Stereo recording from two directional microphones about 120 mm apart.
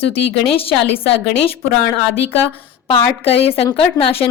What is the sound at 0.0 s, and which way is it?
Speech, 55° left (ahead or behind).